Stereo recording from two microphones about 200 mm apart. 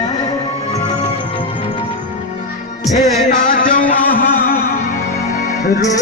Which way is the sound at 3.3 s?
40° left (ahead or behind).